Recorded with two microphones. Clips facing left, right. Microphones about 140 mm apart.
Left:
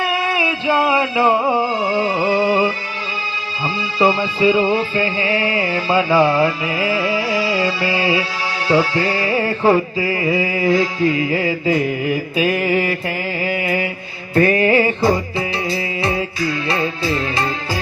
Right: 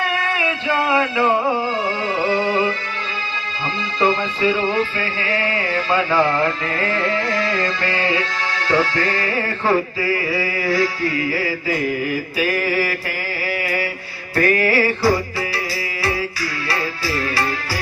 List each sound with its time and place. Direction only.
0.2 s music: 15° left (ahead or behind)
3.9 s music: 10° left (ahead or behind)
13.4 s mantra: 20° left (ahead or behind)
14.3 s music: 20° left (ahead or behind)